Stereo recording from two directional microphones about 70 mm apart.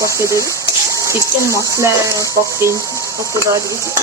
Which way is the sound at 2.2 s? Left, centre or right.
Left.